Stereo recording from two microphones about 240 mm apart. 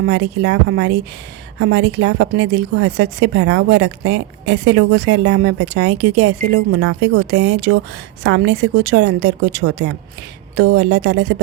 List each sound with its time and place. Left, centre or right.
0.0 s speech: right
7.3 s speech: right